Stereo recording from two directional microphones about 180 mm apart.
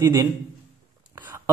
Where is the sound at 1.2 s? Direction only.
15° right (ahead or behind).